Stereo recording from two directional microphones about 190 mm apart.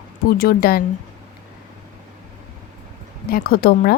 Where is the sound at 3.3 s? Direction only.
50° left (ahead or behind).